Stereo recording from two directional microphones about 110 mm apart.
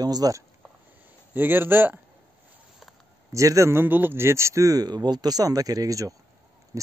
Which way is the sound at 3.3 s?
30° right (ahead or behind).